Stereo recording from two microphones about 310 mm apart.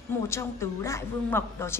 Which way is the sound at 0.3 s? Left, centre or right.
Centre.